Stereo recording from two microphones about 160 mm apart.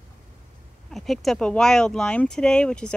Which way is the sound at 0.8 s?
Centre (ahead or behind).